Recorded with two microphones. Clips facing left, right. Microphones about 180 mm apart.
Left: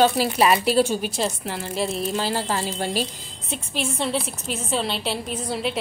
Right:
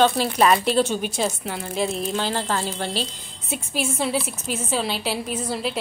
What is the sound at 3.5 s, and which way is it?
A woman's voice, 5° right (ahead or behind).